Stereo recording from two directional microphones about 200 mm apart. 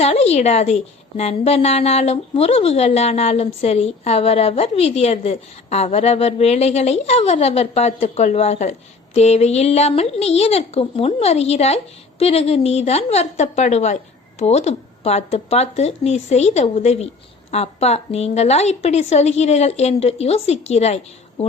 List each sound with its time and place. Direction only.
0.0 s a woman's voice: 30° left (ahead or behind)